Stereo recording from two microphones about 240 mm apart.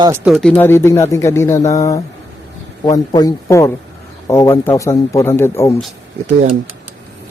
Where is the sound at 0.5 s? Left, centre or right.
Centre.